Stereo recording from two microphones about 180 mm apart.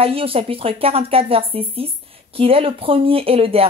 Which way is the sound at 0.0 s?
30° right (ahead or behind).